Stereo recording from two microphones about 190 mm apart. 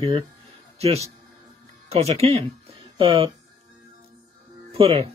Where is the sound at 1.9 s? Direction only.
35° right (ahead or behind).